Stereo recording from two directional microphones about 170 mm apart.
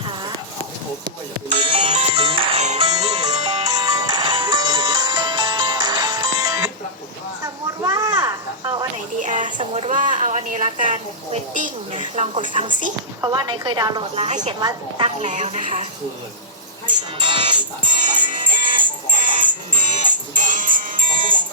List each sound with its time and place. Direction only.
0.0 s clip-clop: 30° right (ahead or behind)
1.0 s music: 35° right (ahead or behind)
2.8 s music: 20° right (ahead or behind)
7.4 s snake: 20° right (ahead or behind)
9.2 s a sound: 45° right (ahead or behind)
9.6 s a sound: 35° right (ahead or behind)
9.9 s a woman's voice: 45° right (ahead or behind)
13.2 s speech: 25° right (ahead or behind)
14.6 s speech: 25° right (ahead or behind)
15.2 s a woman's voice: 45° right (ahead or behind)
17.2 s music: 25° right (ahead or behind)
19.2 s music: 50° right (ahead or behind)